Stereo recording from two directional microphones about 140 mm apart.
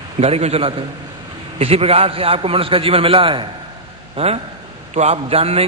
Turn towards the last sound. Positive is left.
turn(degrees=-45)  # may be behind; listen again after turning